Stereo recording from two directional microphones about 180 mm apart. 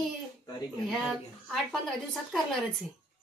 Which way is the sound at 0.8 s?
Centre (ahead or behind).